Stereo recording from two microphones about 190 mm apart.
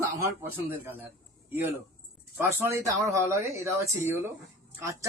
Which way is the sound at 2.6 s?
15° right (ahead or behind).